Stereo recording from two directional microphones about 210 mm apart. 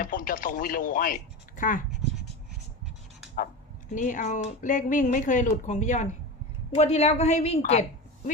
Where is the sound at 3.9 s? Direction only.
40° left (ahead or behind).